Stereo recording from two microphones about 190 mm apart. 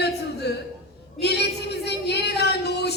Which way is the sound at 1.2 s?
60° left (ahead or behind).